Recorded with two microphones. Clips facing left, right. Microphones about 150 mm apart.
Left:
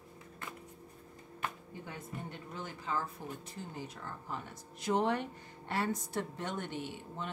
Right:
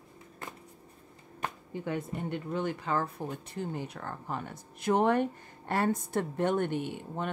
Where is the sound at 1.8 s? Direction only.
65° right (ahead or behind).